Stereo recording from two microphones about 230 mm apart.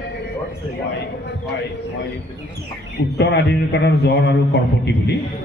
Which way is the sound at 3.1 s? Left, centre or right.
Left.